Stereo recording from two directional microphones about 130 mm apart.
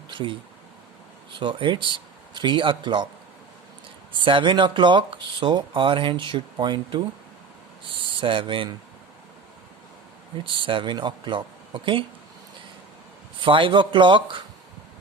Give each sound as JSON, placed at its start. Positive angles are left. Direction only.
{"t": 0.1, "sound": "a sound", "side_deg": -40}
{"t": 1.4, "sound": "speech", "side_deg": -40}
{"t": 4.2, "sound": "speech", "side_deg": -40}
{"t": 10.4, "sound": "speech", "side_deg": -40}
{"t": 13.4, "sound": "speech", "side_deg": -40}